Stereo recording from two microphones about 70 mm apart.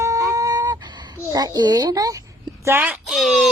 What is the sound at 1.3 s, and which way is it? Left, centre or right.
Speech, right.